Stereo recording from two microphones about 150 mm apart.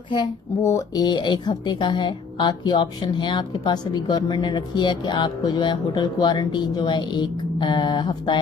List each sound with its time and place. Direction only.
0.6 s a woman's voice: 20° left (ahead or behind)